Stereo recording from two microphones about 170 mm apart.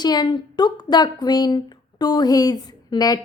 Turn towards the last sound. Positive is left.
turn(degrees=25)  # may be behind; listen again after turning